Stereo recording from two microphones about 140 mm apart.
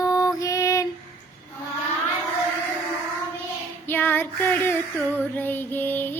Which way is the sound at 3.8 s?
15° left (ahead or behind).